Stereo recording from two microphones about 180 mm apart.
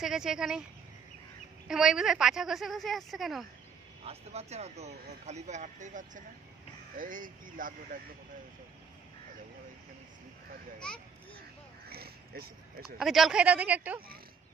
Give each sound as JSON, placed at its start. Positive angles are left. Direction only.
{"t": 0.0, "sound": "a woman's voice", "side_deg": -5}
{"t": 1.7, "sound": "a woman's voice", "side_deg": -5}
{"t": 4.0, "sound": "speech", "side_deg": -35}
{"t": 11.9, "sound": "a sound", "side_deg": -60}
{"t": 12.8, "sound": "speech", "side_deg": 0}